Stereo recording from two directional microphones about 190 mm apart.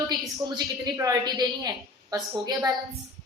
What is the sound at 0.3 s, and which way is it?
A woman's voice, 20° right (ahead or behind).